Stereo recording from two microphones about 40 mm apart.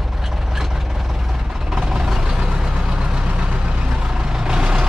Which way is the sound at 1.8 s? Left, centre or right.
Centre.